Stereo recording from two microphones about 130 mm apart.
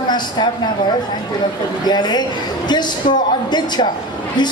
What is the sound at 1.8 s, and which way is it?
A man's voice, 35° left (ahead or behind).